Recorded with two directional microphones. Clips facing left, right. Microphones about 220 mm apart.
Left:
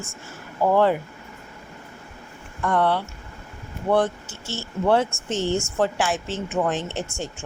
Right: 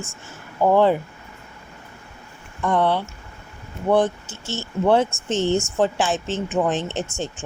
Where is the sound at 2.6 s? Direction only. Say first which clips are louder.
Right 2 dB; 20° right (ahead or behind).